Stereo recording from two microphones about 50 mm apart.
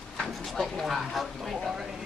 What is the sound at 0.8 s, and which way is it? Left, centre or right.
Speech, centre.